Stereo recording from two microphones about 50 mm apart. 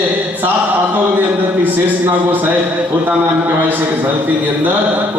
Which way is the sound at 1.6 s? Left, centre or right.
Right.